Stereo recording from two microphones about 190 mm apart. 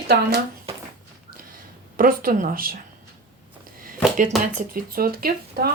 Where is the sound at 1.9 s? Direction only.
50° right (ahead or behind).